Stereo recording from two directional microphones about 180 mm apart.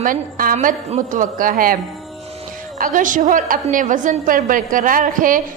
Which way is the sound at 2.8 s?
50° right (ahead or behind).